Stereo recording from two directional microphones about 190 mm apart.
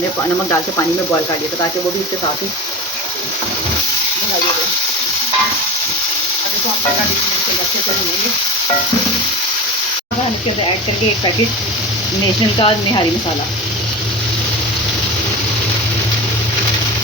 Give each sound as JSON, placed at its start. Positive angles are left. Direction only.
{"t": 12.5, "sound": "speech", "side_deg": 25}